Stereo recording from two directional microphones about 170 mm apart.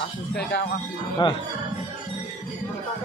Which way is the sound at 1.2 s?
25° left (ahead or behind).